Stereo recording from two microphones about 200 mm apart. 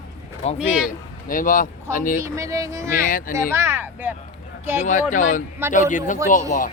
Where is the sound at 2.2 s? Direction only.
15° right (ahead or behind).